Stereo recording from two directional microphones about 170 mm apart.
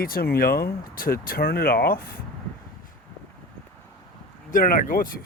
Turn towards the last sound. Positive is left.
turn(degrees=55)  # may be behind; listen again after turning